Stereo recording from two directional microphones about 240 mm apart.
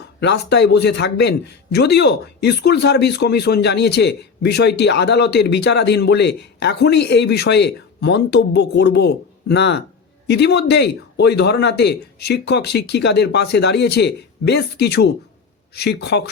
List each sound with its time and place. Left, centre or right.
0.2 s speech: left